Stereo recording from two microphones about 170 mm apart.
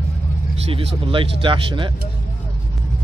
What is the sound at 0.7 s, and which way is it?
Speech, 30° right (ahead or behind).